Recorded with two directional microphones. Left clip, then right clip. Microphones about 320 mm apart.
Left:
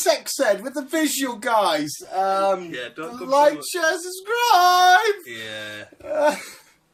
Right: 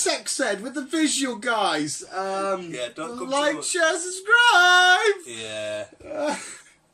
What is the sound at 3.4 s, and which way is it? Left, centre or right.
Speech, centre.